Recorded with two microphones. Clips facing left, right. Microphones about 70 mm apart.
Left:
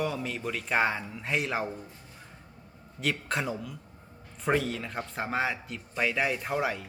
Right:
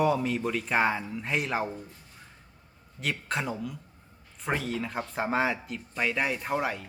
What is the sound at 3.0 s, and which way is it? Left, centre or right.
Speech, centre.